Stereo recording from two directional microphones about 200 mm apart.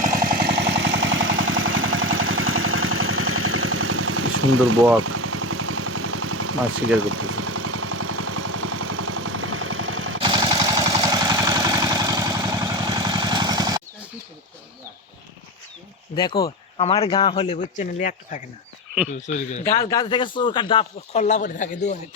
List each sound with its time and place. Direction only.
0.0 s vehicle: 45° right (ahead or behind); by 4.8 s 90° right
4.9 s a sound: 90° right
10.2 s a sound: 25° right (ahead or behind)
16.1 s speech: 20° left (ahead or behind)
17.6 s speech: 40° left (ahead or behind)
19.6 s speech: 15° left (ahead or behind); by 21.8 s 40° left (ahead or behind)